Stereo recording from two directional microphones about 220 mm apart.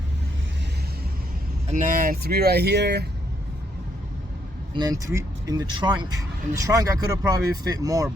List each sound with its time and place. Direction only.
1.7 s speech: 40° right (ahead or behind)
4.7 s speech: 15° right (ahead or behind)